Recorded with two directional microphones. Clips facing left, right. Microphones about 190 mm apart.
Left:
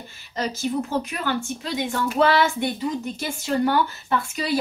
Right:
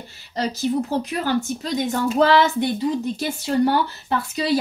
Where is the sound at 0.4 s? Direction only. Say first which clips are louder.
Right 3 dB; 35° right (ahead or behind).